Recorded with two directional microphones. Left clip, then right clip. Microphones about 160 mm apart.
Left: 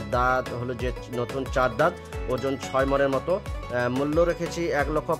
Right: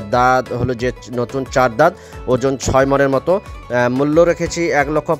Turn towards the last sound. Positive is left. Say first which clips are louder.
# right 9 dB
turn(degrees=-45)  # may be behind; listen again after turning